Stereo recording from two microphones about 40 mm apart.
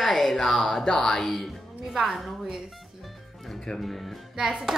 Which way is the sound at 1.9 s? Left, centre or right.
Centre.